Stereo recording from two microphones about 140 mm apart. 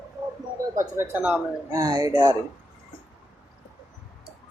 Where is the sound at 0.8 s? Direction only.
15° right (ahead or behind).